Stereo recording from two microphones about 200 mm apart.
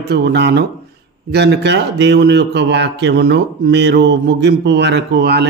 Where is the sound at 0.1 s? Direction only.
60° right (ahead or behind).